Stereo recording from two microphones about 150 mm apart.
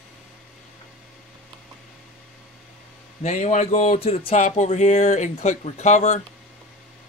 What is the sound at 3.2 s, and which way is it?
Speech, 50° left (ahead or behind).